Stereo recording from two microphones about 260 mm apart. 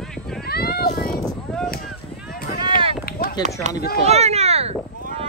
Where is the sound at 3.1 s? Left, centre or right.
Left.